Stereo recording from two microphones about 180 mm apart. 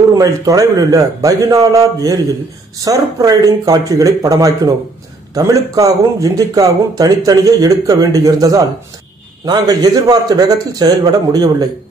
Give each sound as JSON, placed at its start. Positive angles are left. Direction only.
{"t": 0.1, "sound": "speech", "side_deg": -20}